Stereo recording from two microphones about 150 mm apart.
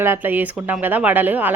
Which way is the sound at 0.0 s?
15° right (ahead or behind).